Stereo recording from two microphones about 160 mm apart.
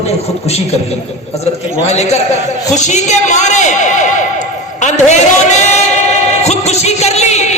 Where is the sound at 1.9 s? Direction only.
45° left (ahead or behind).